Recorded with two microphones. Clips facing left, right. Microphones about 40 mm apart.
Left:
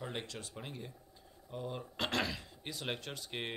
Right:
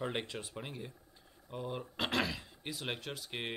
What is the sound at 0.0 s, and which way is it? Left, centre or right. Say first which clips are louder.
Speech: right 4 dB; right.